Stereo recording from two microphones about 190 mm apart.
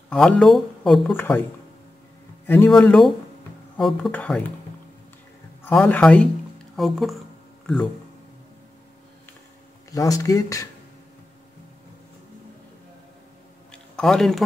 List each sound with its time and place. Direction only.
0.1 s speech: 5° left (ahead or behind)
2.4 s speech: 10° left (ahead or behind)
5.6 s speech: 10° left (ahead or behind)
9.8 s speech: 15° left (ahead or behind)
13.9 s speech: 5° left (ahead or behind)